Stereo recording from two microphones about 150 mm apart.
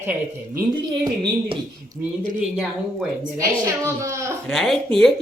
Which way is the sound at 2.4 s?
5° right (ahead or behind).